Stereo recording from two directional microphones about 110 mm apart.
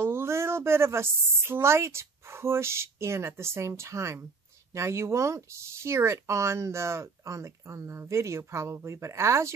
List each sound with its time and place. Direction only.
0.0 s a woman's voice: 20° right (ahead or behind)